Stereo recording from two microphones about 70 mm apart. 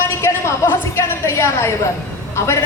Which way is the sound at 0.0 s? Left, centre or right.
Left.